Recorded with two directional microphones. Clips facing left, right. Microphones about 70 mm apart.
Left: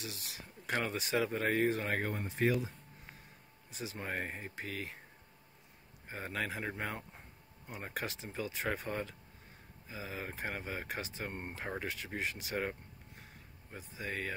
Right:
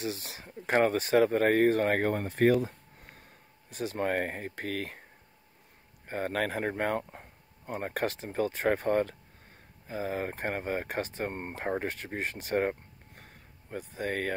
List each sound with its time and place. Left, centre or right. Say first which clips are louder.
0.0 s speech: right 10 dB; right
6.0 s speech: right 8 dB; right